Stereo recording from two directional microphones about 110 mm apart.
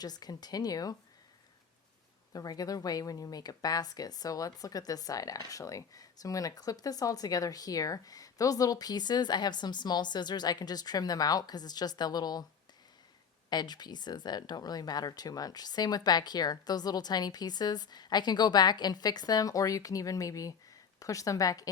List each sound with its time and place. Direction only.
0.0 s speech: 35° left (ahead or behind)
2.3 s speech: 35° left (ahead or behind)
13.5 s speech: 40° left (ahead or behind)